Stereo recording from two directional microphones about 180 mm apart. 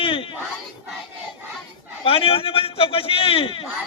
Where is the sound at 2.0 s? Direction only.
30° left (ahead or behind).